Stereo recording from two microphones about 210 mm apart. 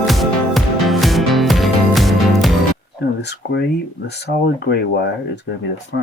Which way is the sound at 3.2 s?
50° left (ahead or behind).